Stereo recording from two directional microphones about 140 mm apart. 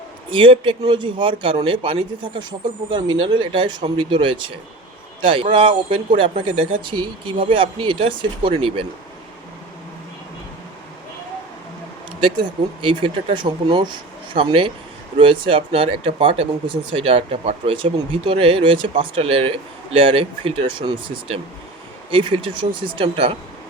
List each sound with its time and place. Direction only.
0.3 s speech: 40° right (ahead or behind)
12.2 s speech: 35° right (ahead or behind)